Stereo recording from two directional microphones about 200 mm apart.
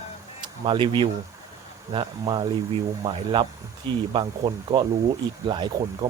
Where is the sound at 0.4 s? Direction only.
25° right (ahead or behind).